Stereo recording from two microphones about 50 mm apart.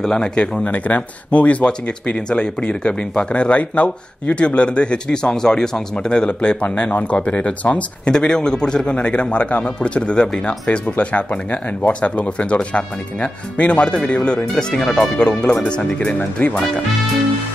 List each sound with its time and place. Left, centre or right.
0.0 s speech: centre
0.7 s speech: left